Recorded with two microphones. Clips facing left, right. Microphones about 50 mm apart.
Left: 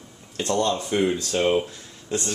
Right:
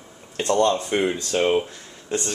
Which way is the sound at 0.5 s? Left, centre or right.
Centre.